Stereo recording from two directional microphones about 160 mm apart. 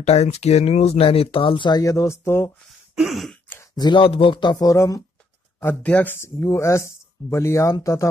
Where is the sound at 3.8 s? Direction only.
30° left (ahead or behind).